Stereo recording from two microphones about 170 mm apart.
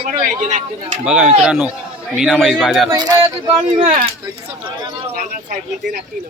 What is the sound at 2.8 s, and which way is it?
Speech, 25° right (ahead or behind).